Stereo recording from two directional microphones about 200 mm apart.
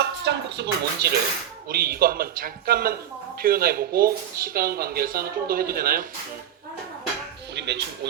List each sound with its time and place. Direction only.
0.0 s a sound: 60° right (ahead or behind)
1.7 s speech: 50° right (ahead or behind)
7.5 s music: 60° right (ahead or behind)